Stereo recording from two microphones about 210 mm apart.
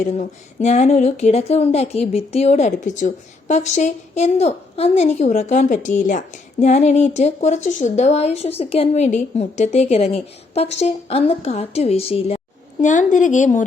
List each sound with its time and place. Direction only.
0.0 s a woman's voice: 35° left (ahead or behind)